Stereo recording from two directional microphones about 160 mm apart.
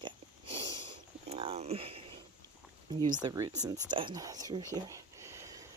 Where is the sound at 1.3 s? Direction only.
40° right (ahead or behind).